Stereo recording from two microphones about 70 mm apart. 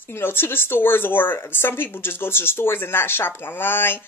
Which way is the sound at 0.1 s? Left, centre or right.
Left.